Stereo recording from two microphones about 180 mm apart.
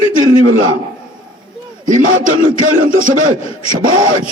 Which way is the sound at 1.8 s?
45° right (ahead or behind).